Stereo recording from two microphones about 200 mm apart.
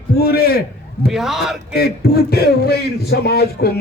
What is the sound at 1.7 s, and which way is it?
A man's voice, 50° left (ahead or behind).